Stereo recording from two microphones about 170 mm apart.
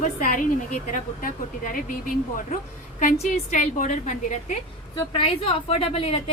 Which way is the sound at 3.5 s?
50° left (ahead or behind).